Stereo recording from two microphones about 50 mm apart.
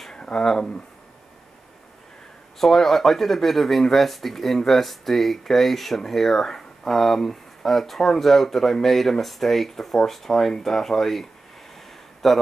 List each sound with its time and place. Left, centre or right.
0.1 s speech: centre
2.6 s speech: centre